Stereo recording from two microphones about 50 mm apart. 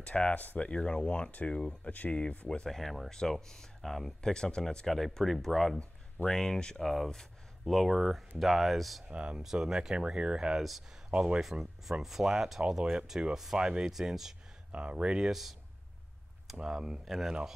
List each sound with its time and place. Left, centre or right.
0.0 s speech: left
0.4 s speech: left
0.7 s speech: centre
4.3 s speech: centre
6.8 s speech: centre
9.0 s speech: centre
9.4 s speech: centre
11.5 s speech: centre
14.7 s speech: right
16.6 s speech: centre